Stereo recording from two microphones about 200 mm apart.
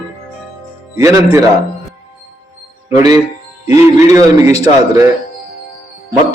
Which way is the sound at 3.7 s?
15° right (ahead or behind).